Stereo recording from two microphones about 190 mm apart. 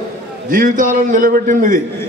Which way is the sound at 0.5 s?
45° right (ahead or behind).